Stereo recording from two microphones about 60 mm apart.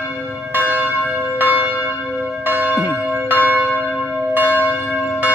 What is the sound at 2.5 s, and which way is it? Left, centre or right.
Church bell, right.